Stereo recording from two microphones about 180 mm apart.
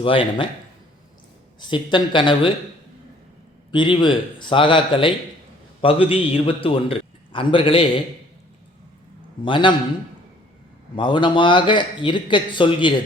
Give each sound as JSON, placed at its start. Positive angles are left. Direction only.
{"t": 0.0, "sound": "speech", "side_deg": 30}
{"t": 1.7, "sound": "speech", "side_deg": 25}
{"t": 3.7, "sound": "a man's voice", "side_deg": 25}
{"t": 9.4, "sound": "speech", "side_deg": 25}
{"t": 10.9, "sound": "speech", "side_deg": 25}